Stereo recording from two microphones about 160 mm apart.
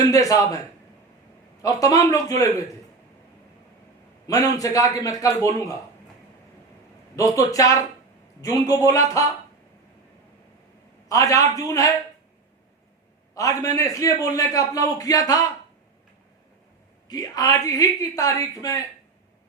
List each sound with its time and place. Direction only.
0.1 s a man's voice: 20° left (ahead or behind)
1.6 s a man's voice: 20° left (ahead or behind)
4.3 s a man's voice: 20° left (ahead or behind)
7.2 s a man's voice: 20° left (ahead or behind)
11.1 s a man's voice: 20° left (ahead or behind)
13.3 s a man's voice: 20° left (ahead or behind)
17.1 s a man's voice: 25° left (ahead or behind)